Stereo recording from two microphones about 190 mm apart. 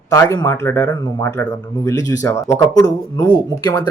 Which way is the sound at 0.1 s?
15° left (ahead or behind).